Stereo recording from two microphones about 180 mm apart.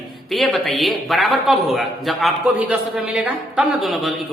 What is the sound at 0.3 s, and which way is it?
A man's voice, centre (ahead or behind).